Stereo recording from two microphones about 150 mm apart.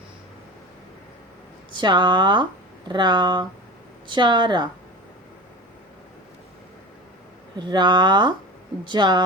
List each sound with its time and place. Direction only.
1.7 s speech: 30° right (ahead or behind)
7.5 s speech: 30° right (ahead or behind)